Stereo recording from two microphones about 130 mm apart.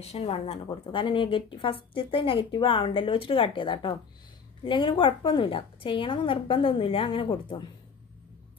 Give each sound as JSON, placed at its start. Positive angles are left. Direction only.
{"t": 0.0, "sound": "a woman's voice", "side_deg": 50}
{"t": 0.7, "sound": "a woman's voice", "side_deg": 40}